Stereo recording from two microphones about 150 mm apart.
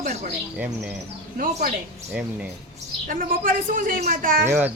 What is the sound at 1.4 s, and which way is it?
Speech, 65° right (ahead or behind).